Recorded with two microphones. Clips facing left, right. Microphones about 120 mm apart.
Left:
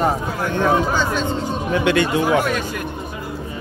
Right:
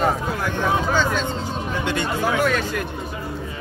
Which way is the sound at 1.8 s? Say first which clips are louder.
Left 5 dB; 80° left.